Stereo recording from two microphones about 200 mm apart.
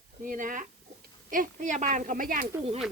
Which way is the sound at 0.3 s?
40° right (ahead or behind).